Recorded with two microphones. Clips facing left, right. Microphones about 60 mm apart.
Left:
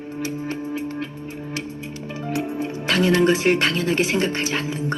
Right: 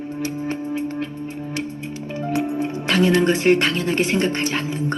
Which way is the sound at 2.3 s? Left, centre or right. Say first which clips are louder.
Right 3 dB; right.